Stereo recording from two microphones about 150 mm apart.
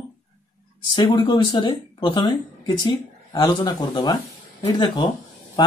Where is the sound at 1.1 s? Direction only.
30° left (ahead or behind).